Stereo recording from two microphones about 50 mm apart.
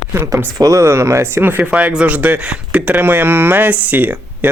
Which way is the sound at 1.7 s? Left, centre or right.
Right.